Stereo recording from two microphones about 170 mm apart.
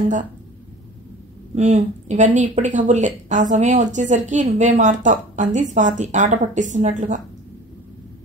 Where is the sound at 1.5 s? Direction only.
45° right (ahead or behind).